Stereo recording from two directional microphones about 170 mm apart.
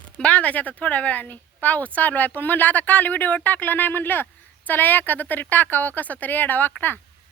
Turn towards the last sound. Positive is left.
turn(degrees=10)  # may be behind; listen again after turning